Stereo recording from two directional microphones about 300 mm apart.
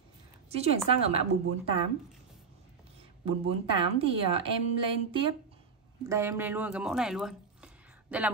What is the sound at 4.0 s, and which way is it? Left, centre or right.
Speech, centre.